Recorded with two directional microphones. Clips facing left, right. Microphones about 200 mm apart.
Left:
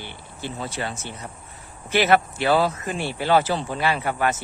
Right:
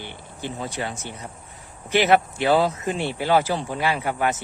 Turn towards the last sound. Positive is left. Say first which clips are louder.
# even
turn(degrees=-15)  # may be behind; listen again after turning